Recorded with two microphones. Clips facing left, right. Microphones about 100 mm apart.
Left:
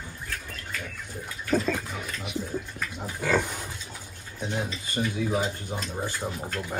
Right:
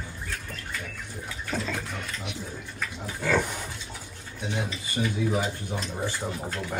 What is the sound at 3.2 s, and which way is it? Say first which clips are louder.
Speech: even; 15° left (ahead or behind).